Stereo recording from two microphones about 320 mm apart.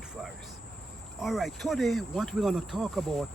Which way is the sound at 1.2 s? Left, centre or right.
Centre.